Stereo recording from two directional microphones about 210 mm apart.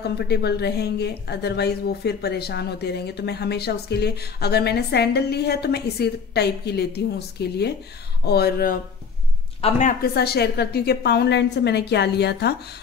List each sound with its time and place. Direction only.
0.0 s a woman's voice: 50° left (ahead or behind)
9.6 s a woman's voice: 30° left (ahead or behind)
10.1 s a woman's voice: 50° left (ahead or behind)